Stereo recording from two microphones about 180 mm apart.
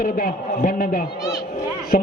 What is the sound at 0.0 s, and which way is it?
A man's voice, 55° left (ahead or behind).